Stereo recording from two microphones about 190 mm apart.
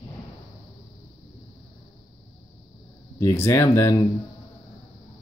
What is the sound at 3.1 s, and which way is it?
Speech, 15° left (ahead or behind).